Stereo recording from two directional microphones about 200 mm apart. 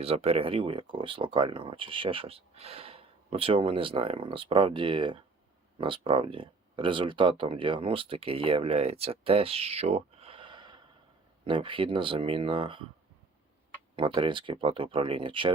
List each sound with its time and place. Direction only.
0.0 s speech: 30° right (ahead or behind)
13.9 s speech: 25° right (ahead or behind)